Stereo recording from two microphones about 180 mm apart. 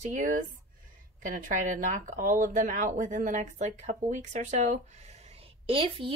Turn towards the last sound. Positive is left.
turn(degrees=-30)  # may be behind; listen again after turning